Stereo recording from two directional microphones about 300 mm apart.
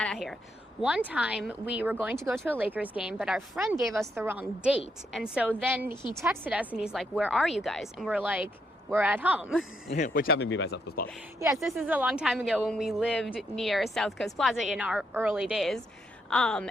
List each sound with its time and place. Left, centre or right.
0.0 s a woman's voice: centre
9.9 s speech: left
11.3 s a woman's voice: centre